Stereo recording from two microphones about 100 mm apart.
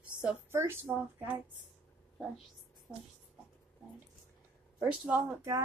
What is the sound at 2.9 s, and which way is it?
Speech, 25° left (ahead or behind).